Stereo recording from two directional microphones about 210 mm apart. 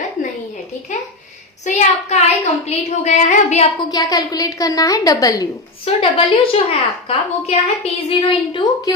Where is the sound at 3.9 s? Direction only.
20° left (ahead or behind).